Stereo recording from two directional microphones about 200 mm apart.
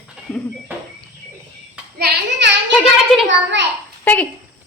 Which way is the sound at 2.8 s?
Centre (ahead or behind).